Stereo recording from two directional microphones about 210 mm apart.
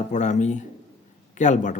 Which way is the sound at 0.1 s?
35° left (ahead or behind).